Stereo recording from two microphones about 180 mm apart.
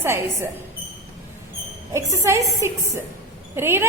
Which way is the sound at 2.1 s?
15° right (ahead or behind).